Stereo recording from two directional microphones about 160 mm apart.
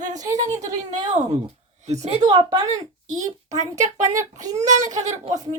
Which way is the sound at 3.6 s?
50° right (ahead or behind).